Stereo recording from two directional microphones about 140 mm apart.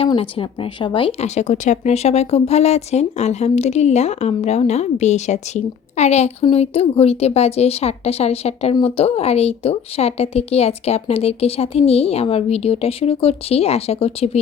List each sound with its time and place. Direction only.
0.0 s speech: 40° left (ahead or behind)